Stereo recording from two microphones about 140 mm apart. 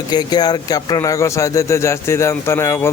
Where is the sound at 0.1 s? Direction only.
30° left (ahead or behind).